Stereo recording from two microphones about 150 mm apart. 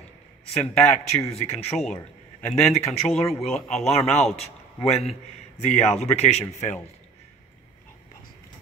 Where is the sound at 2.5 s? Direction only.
Centre (ahead or behind).